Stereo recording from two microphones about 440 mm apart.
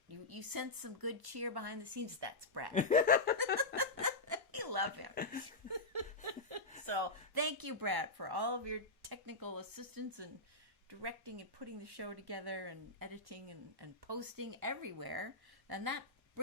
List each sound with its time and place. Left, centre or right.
0.1 s speech: right
2.7 s speech: centre
3.8 s a sound: right
5.1 s speech: centre
5.5 s a sound: right
6.5 s chuckle: right
6.8 s speech: right
11.0 s speech: right